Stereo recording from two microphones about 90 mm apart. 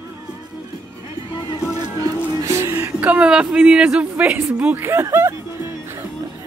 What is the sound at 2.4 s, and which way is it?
Music, 35° right (ahead or behind).